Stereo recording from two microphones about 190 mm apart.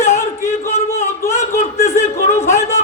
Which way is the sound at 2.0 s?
35° left (ahead or behind).